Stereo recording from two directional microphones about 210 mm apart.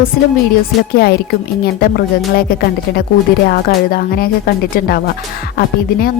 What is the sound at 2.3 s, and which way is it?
A woman's voice, 45° left (ahead or behind).